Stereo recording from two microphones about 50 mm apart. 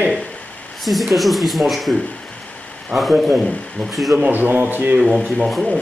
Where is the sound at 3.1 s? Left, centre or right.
Centre.